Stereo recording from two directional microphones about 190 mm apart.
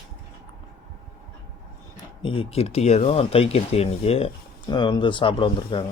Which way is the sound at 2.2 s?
30° left (ahead or behind).